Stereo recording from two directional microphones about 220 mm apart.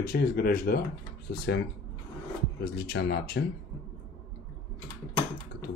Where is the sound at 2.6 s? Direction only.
50° left (ahead or behind).